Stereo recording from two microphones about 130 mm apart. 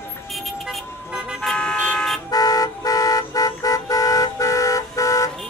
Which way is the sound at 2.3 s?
30° left (ahead or behind).